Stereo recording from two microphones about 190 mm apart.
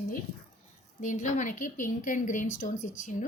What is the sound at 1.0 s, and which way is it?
A woman's voice, 40° left (ahead or behind).